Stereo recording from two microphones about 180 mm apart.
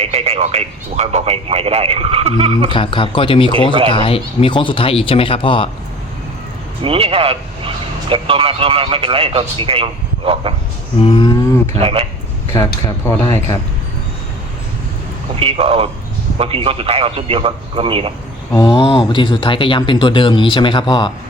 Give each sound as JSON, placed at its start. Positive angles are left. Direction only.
{"t": 0.0, "sound": "speech", "side_deg": -35}
{"t": 2.6, "sound": "speech", "side_deg": 30}
{"t": 3.7, "sound": "speech", "side_deg": -30}
{"t": 3.9, "sound": "speech", "side_deg": 30}
{"t": 6.8, "sound": "speech", "side_deg": -30}
{"t": 11.0, "sound": "a sound", "side_deg": 30}
{"t": 11.6, "sound": "speech", "side_deg": -35}
{"t": 12.5, "sound": "speech", "side_deg": 15}
{"t": 15.4, "sound": "speech", "side_deg": -30}
{"t": 18.5, "sound": "speech", "side_deg": 25}